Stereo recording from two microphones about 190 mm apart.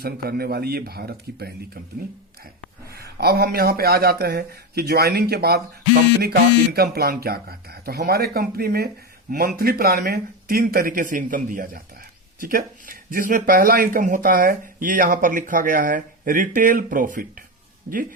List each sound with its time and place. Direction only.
0.0 s speech: 55° right (ahead or behind)
2.9 s speech: 55° right (ahead or behind)